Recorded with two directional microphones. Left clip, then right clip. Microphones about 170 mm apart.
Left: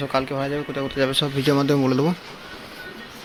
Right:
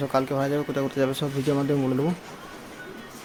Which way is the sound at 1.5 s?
20° left (ahead or behind).